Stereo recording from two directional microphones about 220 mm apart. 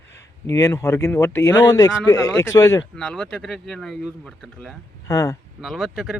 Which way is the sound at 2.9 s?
5° left (ahead or behind).